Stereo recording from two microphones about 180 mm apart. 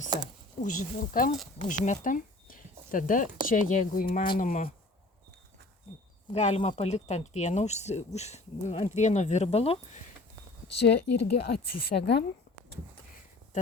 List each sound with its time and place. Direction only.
0.1 s speech: 20° right (ahead or behind)
0.6 s speech: 45° left (ahead or behind)
6.3 s speech: 35° left (ahead or behind)
10.7 s speech: 70° left (ahead or behind)
11.4 s speech: 60° left (ahead or behind)